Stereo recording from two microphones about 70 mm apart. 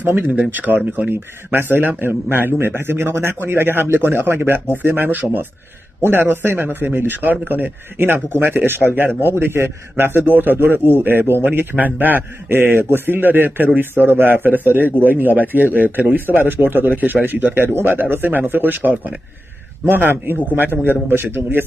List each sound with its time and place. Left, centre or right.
0.0 s a man's voice: right